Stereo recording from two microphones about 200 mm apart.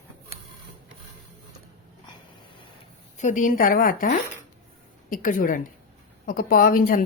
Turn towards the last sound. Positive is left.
turn(degrees=45)  # may be behind; listen again after turning